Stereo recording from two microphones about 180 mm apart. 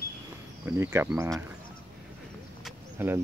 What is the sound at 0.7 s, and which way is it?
Speech, 15° right (ahead or behind).